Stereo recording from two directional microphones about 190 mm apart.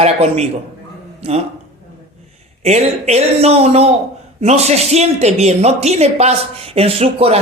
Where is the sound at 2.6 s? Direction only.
35° right (ahead or behind).